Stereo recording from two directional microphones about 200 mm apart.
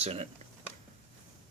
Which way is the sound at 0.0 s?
30° right (ahead or behind).